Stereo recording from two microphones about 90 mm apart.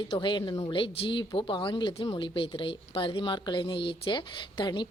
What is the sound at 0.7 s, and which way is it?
Speech, 70° left (ahead or behind).